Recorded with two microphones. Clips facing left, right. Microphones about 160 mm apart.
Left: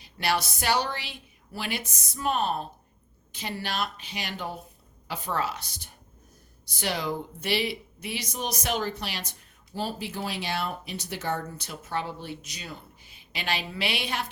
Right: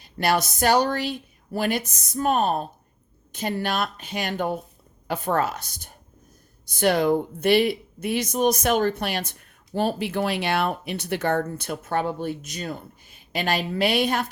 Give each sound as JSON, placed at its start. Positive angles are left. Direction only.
{"t": 0.0, "sound": "speech", "side_deg": -45}